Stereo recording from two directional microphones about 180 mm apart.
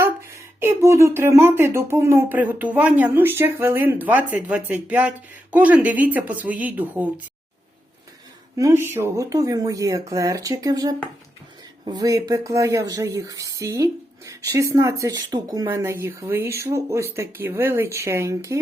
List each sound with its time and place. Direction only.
0.0 s speech: 15° right (ahead or behind)
8.5 s speech: 15° right (ahead or behind)